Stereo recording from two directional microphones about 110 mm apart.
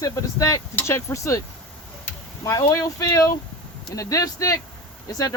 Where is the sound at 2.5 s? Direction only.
30° left (ahead or behind).